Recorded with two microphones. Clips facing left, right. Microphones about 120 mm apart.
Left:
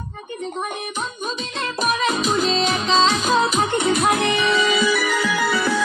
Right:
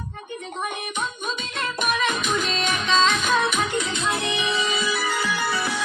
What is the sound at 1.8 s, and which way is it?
Music, 35° left (ahead or behind).